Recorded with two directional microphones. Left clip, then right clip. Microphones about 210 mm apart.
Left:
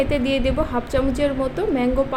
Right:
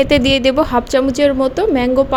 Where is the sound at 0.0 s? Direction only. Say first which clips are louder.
Right 8 dB; 40° right (ahead or behind).